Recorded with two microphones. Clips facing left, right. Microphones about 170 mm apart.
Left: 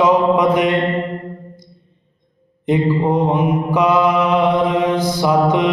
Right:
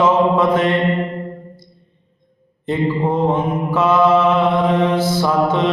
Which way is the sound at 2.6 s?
15° left (ahead or behind).